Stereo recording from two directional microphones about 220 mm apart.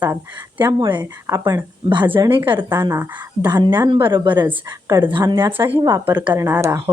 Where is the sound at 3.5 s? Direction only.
20° right (ahead or behind).